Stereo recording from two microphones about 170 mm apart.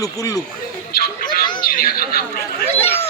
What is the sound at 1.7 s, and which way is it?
Speech, 55° left (ahead or behind).